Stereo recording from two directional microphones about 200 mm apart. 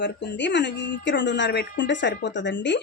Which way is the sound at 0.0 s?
60° left (ahead or behind).